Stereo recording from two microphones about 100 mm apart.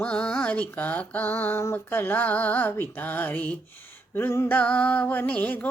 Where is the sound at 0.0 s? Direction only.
10° left (ahead or behind).